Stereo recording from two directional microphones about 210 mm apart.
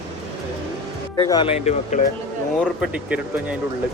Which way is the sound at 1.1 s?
20° left (ahead or behind).